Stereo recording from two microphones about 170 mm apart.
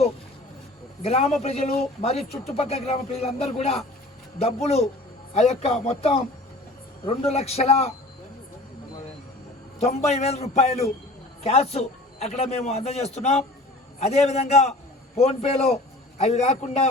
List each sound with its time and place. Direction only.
1.0 s a man's voice: 40° left (ahead or behind)
9.8 s a man's voice: 40° left (ahead or behind)